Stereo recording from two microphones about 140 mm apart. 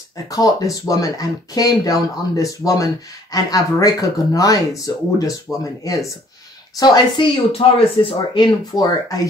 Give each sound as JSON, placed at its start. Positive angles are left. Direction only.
{"t": 0.3, "sound": "speech", "side_deg": 25}
{"t": 6.8, "sound": "speech", "side_deg": 30}